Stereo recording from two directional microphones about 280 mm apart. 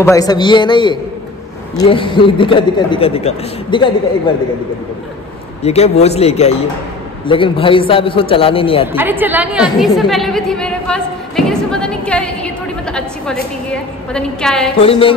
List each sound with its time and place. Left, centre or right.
0.0 s a man's voice: centre
5.6 s a man's voice: left
8.8 s a woman's voice: centre
14.8 s a man's voice: centre